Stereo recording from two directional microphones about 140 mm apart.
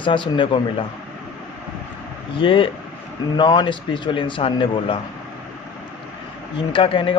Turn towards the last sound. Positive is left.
turn(degrees=40)  # may be behind; listen again after turning